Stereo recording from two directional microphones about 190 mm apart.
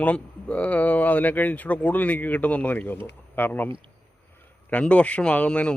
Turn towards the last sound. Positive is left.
turn(degrees=5)  # may be behind; listen again after turning